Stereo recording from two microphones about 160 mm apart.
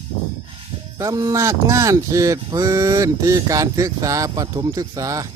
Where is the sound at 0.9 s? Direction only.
20° right (ahead or behind).